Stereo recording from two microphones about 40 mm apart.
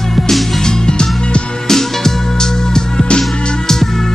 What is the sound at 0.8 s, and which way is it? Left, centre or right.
Music, centre.